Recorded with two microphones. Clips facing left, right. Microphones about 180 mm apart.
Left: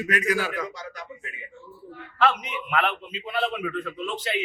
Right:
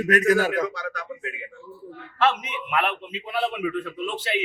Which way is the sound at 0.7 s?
70° right (ahead or behind).